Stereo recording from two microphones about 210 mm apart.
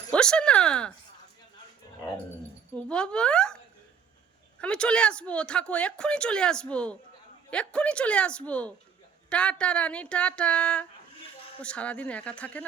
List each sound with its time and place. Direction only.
0.1 s speech: 5° left (ahead or behind)
2.7 s speech: 5° left (ahead or behind)
4.6 s speech: 5° left (ahead or behind)